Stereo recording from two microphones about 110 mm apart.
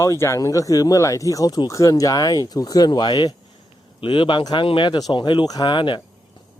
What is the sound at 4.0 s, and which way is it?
Speech, 50° left (ahead or behind).